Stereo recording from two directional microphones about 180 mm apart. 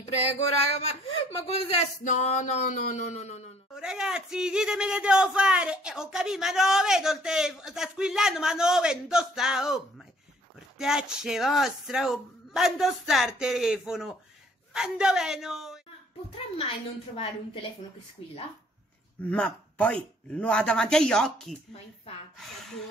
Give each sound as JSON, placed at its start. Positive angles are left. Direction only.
{"t": 0.7, "sound": "speech", "side_deg": 35}
{"t": 3.7, "sound": "speech", "side_deg": -5}
{"t": 16.5, "sound": "speech", "side_deg": 30}
{"t": 19.3, "sound": "speech", "side_deg": 5}